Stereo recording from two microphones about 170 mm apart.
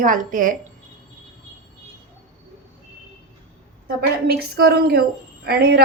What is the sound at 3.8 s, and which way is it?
A woman's voice, 65° right (ahead or behind).